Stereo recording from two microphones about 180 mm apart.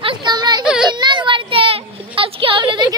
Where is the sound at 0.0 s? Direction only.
25° right (ahead or behind).